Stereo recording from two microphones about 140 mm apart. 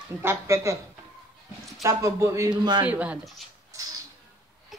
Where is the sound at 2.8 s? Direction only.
10° right (ahead or behind).